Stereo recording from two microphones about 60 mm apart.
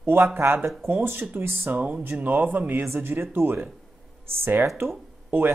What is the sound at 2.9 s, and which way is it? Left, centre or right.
Speech, right.